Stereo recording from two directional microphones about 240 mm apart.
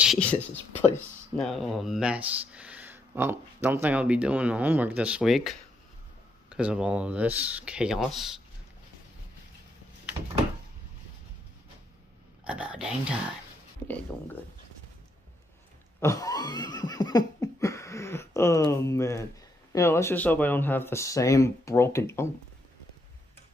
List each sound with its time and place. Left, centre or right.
0.0 s speech: centre
10.2 s door: right
12.4 s speech: centre
16.0 s a sound: centre
19.7 s speech: centre